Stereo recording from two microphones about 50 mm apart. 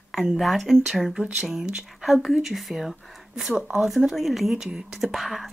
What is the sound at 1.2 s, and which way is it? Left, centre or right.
Speech, centre.